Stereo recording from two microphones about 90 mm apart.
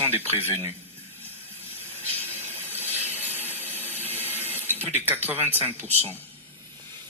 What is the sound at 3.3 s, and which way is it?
Ratchet, 20° left (ahead or behind).